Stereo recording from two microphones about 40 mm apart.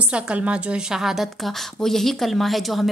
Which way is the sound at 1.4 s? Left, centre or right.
Centre.